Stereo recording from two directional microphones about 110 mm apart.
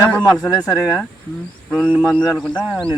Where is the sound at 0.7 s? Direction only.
25° left (ahead or behind).